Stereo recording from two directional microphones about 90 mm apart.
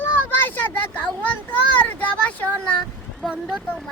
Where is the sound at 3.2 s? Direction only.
Centre (ahead or behind).